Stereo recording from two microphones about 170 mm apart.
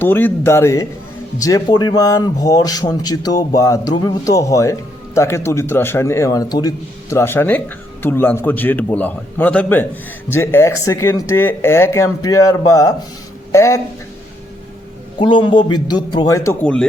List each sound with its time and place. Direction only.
0.0 s a man's voice: 10° left (ahead or behind)
15.2 s a man's voice: 30° left (ahead or behind)